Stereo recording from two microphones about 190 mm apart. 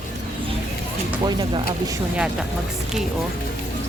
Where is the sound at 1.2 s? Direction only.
20° right (ahead or behind).